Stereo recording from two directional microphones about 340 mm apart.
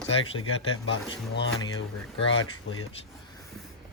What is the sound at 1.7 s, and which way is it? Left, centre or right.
Speech, left.